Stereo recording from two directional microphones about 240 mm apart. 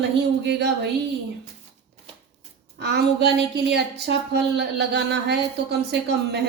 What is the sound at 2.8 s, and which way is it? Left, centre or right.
A woman's voice, right.